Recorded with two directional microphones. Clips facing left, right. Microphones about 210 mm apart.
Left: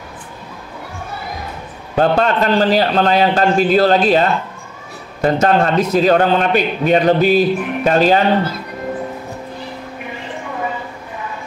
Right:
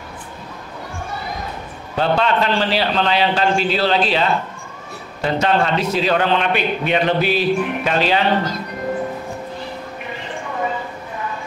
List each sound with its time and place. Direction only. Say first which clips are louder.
2.0 s a man's voice: left 3 dB; 45° left (ahead or behind)